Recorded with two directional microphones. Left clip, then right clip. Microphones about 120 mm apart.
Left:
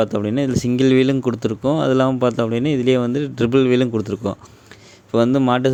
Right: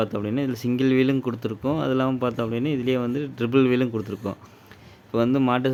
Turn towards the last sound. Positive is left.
turn(degrees=35)  # may be behind; listen again after turning